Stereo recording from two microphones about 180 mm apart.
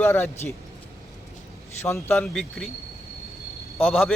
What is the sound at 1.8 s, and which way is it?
Speech, 15° left (ahead or behind).